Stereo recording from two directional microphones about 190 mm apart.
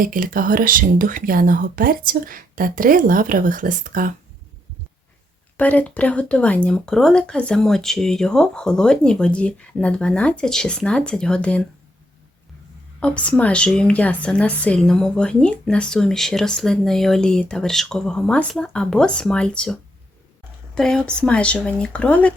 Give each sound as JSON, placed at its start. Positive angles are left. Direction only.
{"t": 0.0, "sound": "speech", "side_deg": -45}
{"t": 5.5, "sound": "a woman's voice", "side_deg": 10}
{"t": 13.0, "sound": "a woman's voice", "side_deg": 5}